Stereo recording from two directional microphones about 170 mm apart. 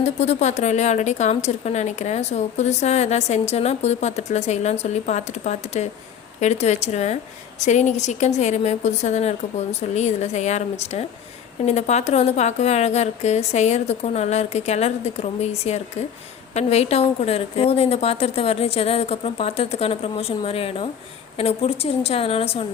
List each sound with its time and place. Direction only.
0.0 s a woman's voice: 45° left (ahead or behind)